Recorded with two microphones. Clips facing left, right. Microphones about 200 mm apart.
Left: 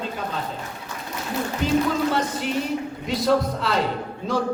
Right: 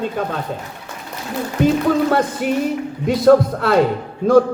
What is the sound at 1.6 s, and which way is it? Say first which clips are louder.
A man's voice: right 6 dB; 55° right (ahead or behind).